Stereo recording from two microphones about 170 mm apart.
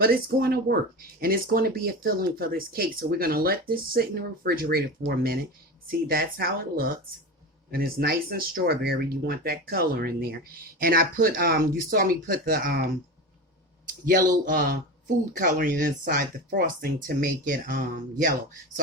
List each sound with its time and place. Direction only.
0.0 s speech: 60° right (ahead or behind)
14.4 s a woman's voice: 55° right (ahead or behind)
15.4 s speech: 55° right (ahead or behind)